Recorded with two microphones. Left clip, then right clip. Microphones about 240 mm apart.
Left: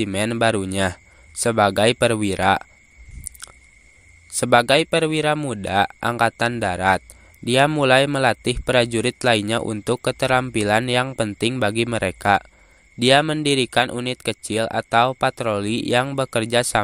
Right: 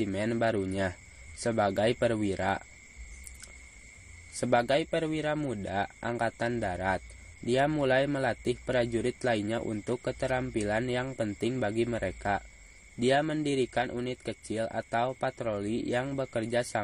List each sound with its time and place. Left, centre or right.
0.0 s speech: left
4.4 s speech: left